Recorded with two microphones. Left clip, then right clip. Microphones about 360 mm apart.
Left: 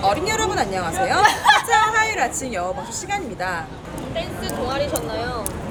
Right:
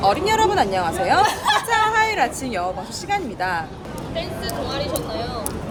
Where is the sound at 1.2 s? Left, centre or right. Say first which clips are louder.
Left 7 dB; left.